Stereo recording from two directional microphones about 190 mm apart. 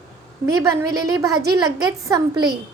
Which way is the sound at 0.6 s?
15° right (ahead or behind).